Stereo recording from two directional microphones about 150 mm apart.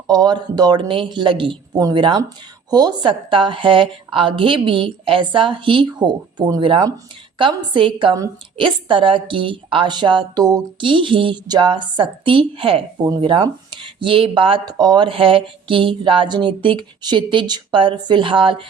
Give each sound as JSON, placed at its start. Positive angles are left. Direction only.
{"t": 0.1, "sound": "a woman's voice", "side_deg": -30}